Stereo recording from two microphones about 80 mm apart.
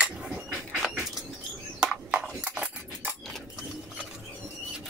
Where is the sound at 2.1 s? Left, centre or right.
Right.